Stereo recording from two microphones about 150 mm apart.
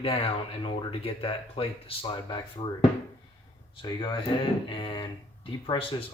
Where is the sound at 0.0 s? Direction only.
40° left (ahead or behind).